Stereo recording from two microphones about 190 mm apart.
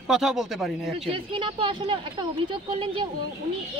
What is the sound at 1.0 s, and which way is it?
Speech, 30° right (ahead or behind).